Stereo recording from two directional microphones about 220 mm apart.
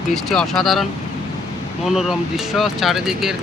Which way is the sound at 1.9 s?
Centre (ahead or behind).